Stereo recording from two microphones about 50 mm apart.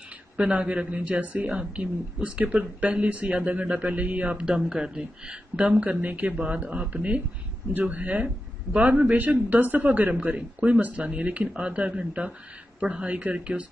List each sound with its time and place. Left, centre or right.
0.4 s speech: right
2.8 s speech: right
4.6 s speech: centre